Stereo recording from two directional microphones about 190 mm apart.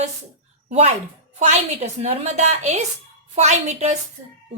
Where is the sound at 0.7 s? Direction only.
35° right (ahead or behind).